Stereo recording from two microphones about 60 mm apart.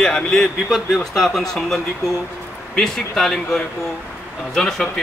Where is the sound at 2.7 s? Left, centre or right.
Centre.